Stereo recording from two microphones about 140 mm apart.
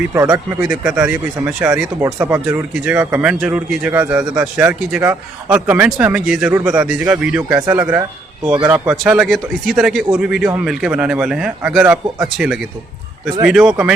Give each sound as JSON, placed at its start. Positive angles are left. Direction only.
{"t": 0.1, "sound": "speech", "side_deg": -20}
{"t": 0.6, "sound": "speech", "side_deg": -5}